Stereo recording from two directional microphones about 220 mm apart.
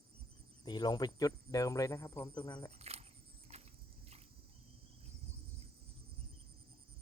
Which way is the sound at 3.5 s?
30° right (ahead or behind).